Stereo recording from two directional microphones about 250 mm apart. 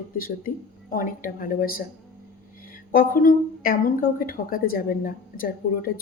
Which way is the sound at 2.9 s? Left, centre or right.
Left.